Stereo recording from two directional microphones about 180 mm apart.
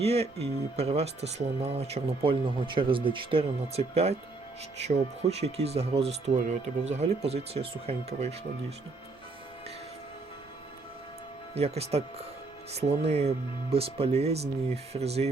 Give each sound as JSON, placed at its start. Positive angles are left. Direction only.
{"t": 0.0, "sound": "speech", "side_deg": -35}
{"t": 11.5, "sound": "speech", "side_deg": -35}